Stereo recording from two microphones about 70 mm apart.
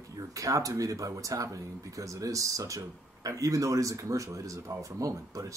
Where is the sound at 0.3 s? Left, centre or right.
Right.